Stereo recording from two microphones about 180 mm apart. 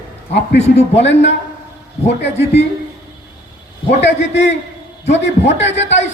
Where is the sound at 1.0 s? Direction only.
80° left.